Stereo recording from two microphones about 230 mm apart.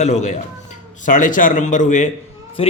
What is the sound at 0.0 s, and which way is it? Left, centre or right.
A man's voice, left.